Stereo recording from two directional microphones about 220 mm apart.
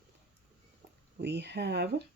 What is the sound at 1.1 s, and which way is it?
Speech, 50° right (ahead or behind).